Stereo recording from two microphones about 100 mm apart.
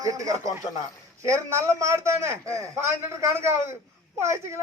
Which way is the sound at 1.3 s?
30° right (ahead or behind).